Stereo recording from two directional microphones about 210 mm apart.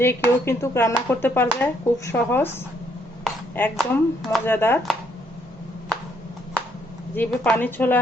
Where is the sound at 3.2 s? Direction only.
10° left (ahead or behind).